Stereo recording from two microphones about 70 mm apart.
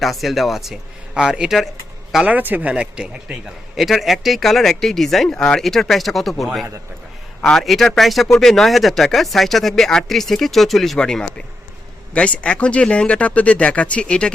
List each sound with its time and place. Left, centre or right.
0.0 s speech: centre
2.2 s speech: right
3.8 s speech: centre